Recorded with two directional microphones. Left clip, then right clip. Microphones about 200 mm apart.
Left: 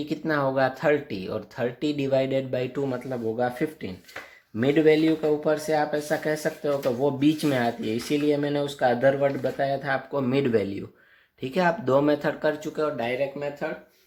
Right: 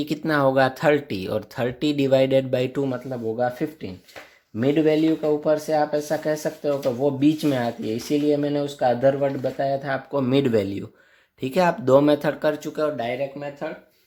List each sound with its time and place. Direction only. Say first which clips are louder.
0.0 s speech: right 5 dB; 35° right (ahead or behind)
2.8 s speech: right 2 dB; 20° right (ahead or behind)